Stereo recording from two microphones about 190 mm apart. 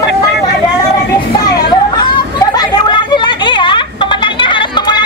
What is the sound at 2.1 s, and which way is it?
Children playing, 25° left (ahead or behind).